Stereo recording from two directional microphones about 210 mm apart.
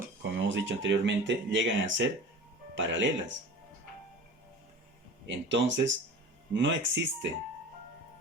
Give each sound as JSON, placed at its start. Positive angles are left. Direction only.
{"t": 0.2, "sound": "speech", "side_deg": -60}
{"t": 5.2, "sound": "speech", "side_deg": -60}